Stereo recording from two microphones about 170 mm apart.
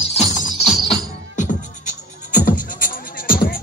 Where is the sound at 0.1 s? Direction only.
40° left (ahead or behind).